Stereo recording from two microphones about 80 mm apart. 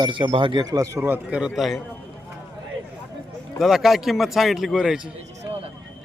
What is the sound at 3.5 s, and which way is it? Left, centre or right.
A man's voice, centre.